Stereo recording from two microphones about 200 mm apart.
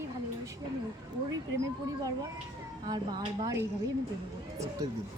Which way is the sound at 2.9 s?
20° right (ahead or behind).